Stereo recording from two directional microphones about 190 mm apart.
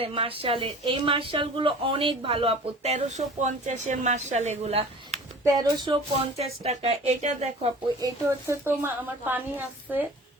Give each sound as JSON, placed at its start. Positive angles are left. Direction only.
{"t": 0.0, "sound": "speech", "side_deg": -30}
{"t": 5.5, "sound": "speech", "side_deg": -20}
{"t": 8.0, "sound": "a woman's voice", "side_deg": -10}